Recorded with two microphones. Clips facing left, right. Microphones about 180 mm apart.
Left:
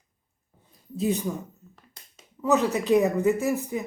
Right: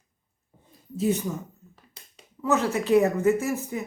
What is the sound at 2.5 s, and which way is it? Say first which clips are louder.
Speech: left 1 dB; 15° left (ahead or behind).